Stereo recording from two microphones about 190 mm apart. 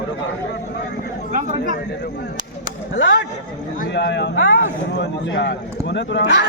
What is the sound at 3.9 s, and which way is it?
Speech, 65° left (ahead or behind).